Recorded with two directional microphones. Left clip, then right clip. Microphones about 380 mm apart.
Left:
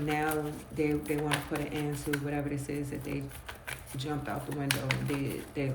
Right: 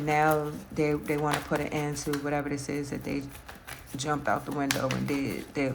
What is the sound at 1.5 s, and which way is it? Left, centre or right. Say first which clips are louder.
Speech: right 5 dB; centre.